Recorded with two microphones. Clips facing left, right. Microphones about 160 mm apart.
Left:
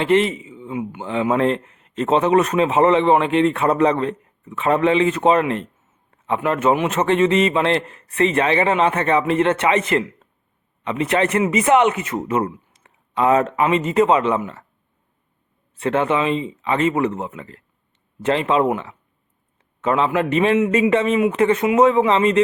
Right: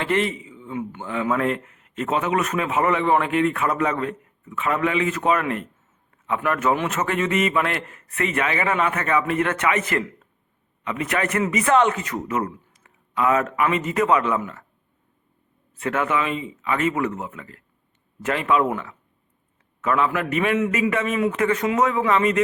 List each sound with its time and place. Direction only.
0.0 s speech: 20° left (ahead or behind)
15.8 s speech: 30° left (ahead or behind)